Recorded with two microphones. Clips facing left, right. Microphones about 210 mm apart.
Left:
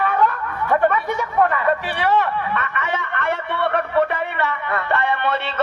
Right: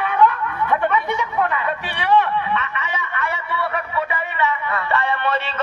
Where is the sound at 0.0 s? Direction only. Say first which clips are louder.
Right 2 dB; 45° left (ahead or behind).